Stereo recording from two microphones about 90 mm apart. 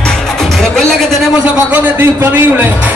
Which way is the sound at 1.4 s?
15° right (ahead or behind).